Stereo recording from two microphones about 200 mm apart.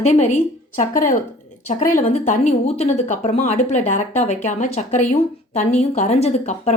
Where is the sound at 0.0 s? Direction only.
35° left (ahead or behind).